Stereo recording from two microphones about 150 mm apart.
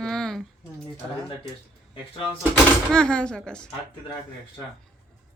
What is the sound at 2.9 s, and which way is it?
Speech, 5° left (ahead or behind).